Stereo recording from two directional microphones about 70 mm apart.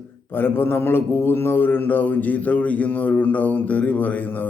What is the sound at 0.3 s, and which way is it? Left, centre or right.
Mantra, left.